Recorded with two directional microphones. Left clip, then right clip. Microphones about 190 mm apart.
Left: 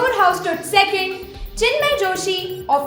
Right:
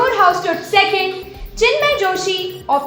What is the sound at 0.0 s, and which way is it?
A woman's voice, 30° left (ahead or behind).